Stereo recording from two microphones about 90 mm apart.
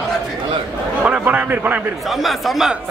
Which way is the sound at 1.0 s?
15° right (ahead or behind).